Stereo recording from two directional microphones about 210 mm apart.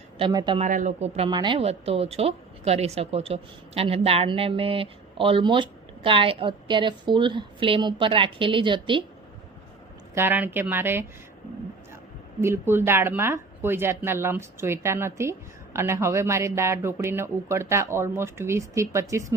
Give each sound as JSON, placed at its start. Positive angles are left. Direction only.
{"t": 0.2, "sound": "speech", "side_deg": -20}
{"t": 0.6, "sound": "speech", "side_deg": -40}
{"t": 10.2, "sound": "speech", "side_deg": -10}
{"t": 12.4, "sound": "speech", "side_deg": -10}